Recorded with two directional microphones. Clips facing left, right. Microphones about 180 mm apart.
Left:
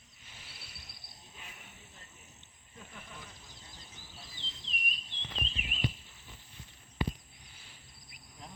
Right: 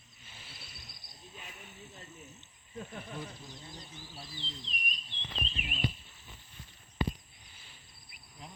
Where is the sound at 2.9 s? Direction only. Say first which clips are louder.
Right 6 dB; 50° right (ahead or behind).